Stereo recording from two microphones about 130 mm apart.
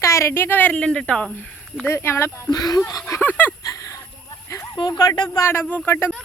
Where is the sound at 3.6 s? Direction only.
25° left (ahead or behind).